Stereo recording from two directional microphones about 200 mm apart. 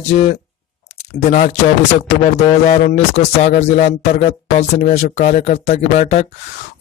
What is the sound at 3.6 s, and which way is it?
Speech, 35° left (ahead or behind).